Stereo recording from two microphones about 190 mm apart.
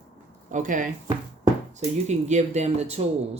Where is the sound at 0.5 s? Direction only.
40° right (ahead or behind).